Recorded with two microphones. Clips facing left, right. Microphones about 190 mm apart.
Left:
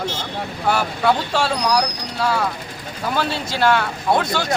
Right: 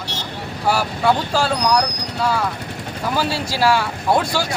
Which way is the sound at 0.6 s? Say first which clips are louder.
Right 1 dB; 5° right (ahead or behind).